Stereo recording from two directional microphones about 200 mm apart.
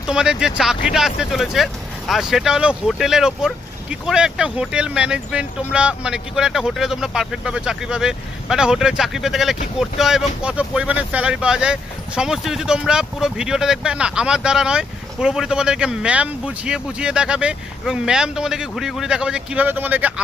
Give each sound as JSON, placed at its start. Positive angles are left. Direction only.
{"t": 0.1, "sound": "speech", "side_deg": -5}